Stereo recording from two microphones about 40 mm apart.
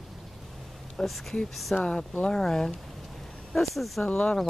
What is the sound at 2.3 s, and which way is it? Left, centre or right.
Speech, centre.